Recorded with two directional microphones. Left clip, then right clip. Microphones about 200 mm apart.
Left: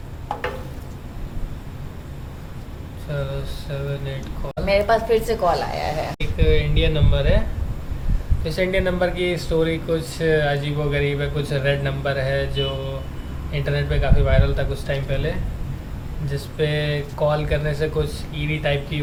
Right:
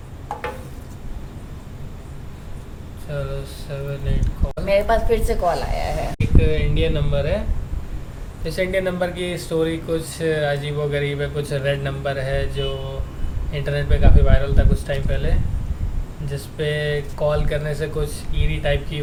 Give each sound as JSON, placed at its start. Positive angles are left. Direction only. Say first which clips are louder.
{"t": 3.1, "sound": "speech", "louder": "even", "side_deg": -10}
{"t": 4.6, "sound": "a woman's voice", "louder": "even", "side_deg": 20}
{"t": 6.3, "sound": "speech", "louder": "left 2 dB", "side_deg": 0}
{"t": 8.4, "sound": "speech", "louder": "even", "side_deg": -5}